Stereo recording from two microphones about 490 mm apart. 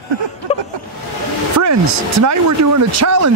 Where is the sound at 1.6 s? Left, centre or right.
Right.